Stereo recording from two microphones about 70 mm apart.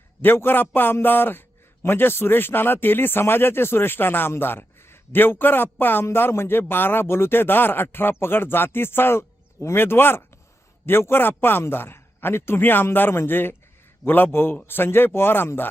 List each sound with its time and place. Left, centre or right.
0.2 s a man's voice: left